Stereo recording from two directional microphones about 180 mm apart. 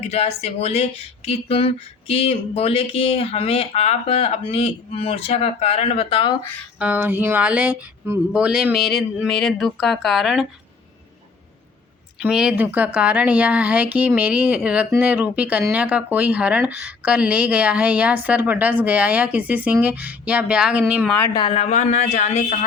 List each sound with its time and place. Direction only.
0.1 s speech: 35° left (ahead or behind)
6.7 s speech: 10° right (ahead or behind)
12.2 s speech: 5° right (ahead or behind)
21.3 s speech: 30° left (ahead or behind)